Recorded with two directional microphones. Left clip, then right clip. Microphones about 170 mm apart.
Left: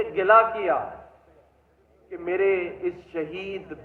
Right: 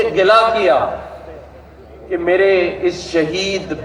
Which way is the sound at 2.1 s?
40° right (ahead or behind).